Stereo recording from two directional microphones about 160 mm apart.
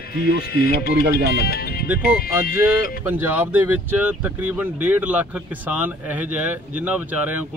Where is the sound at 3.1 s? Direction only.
10° right (ahead or behind).